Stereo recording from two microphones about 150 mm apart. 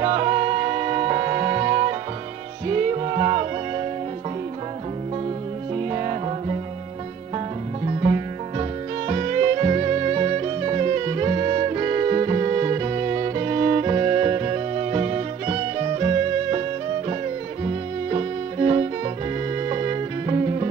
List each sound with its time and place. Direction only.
0.0 s music: 40° right (ahead or behind)
5.8 s music: 35° right (ahead or behind)
17.6 s music: 40° right (ahead or behind)